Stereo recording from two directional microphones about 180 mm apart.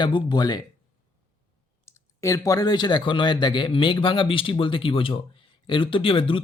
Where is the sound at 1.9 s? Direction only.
15° left (ahead or behind).